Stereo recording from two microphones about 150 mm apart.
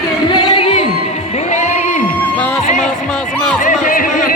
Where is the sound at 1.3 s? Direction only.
50° left (ahead or behind).